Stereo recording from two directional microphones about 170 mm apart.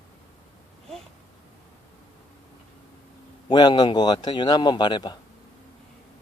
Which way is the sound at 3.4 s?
25° left (ahead or behind).